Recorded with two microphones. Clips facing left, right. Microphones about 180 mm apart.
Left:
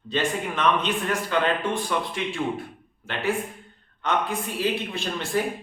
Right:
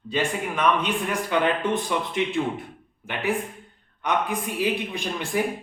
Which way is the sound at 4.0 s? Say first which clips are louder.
Right 1 dB; 15° right (ahead or behind).